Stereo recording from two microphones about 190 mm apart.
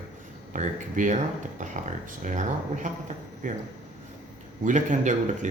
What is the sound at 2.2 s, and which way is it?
Speech, 40° right (ahead or behind).